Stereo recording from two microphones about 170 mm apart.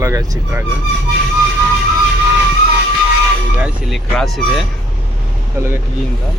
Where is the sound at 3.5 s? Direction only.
5° right (ahead or behind).